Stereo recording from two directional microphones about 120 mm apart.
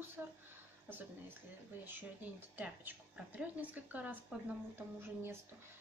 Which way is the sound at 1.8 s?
15° right (ahead or behind).